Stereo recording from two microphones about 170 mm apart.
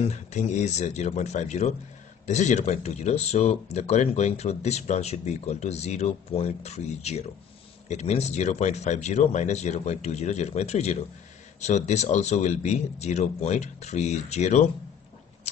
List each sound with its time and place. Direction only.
0.0 s speech: 40° left (ahead or behind)